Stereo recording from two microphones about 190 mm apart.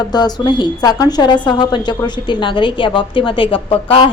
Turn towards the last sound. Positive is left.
turn(degrees=30)  # may be behind; listen again after turning